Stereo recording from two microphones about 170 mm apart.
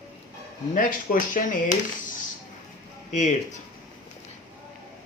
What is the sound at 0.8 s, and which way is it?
Speech, 55° left (ahead or behind).